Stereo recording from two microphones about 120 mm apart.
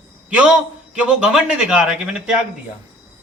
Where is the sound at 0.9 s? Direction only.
10° right (ahead or behind).